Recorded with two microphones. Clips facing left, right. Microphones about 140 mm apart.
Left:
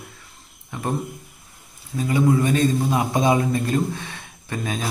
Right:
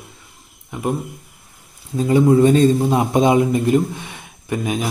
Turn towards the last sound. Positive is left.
turn(degrees=-15)  # may be behind; listen again after turning